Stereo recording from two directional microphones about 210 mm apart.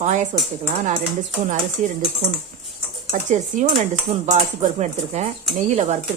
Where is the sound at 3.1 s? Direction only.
35° right (ahead or behind).